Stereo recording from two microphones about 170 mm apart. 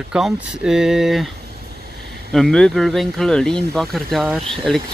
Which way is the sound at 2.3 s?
5° left (ahead or behind).